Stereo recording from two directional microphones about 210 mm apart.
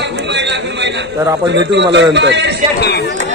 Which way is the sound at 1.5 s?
55° right (ahead or behind).